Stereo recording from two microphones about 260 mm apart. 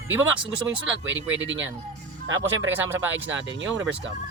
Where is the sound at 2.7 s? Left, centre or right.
Centre.